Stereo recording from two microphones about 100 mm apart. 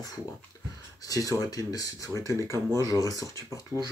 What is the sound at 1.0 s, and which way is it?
Speech, 35° left (ahead or behind).